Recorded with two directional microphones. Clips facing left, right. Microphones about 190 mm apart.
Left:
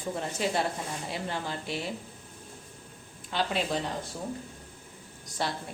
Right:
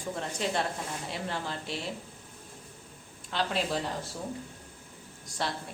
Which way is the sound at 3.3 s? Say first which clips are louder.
Left 1 dB; centre (ahead or behind).